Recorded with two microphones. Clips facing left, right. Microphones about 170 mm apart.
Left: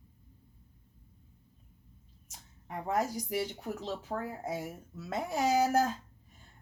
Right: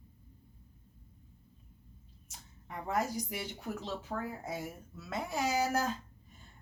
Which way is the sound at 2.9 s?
40° left (ahead or behind).